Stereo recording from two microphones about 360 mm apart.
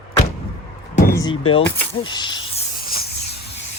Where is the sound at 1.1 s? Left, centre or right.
Centre.